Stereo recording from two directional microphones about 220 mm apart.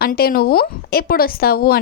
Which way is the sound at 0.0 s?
45° left (ahead or behind).